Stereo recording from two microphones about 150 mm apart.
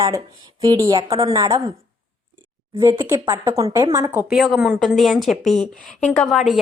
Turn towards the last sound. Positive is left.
turn(degrees=0)  # may be behind; listen again after turning